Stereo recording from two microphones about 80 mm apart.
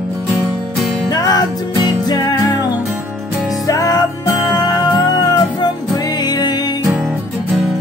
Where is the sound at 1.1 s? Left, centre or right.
Left.